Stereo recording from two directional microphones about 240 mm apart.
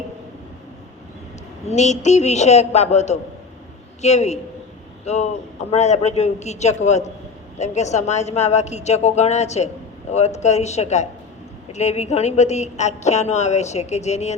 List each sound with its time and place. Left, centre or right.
1.7 s a woman's voice: left